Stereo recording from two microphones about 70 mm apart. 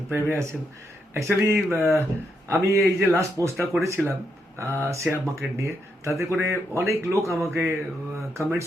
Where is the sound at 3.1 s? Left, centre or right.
Right.